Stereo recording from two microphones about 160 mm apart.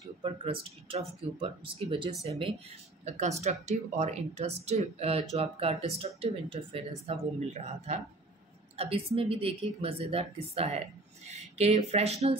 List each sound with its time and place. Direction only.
0.2 s a woman's voice: 35° right (ahead or behind)